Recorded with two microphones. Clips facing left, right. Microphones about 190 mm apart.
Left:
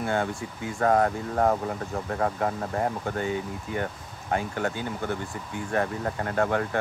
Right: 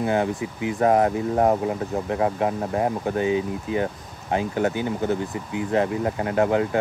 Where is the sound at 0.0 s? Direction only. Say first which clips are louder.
Right 5 dB; 20° right (ahead or behind).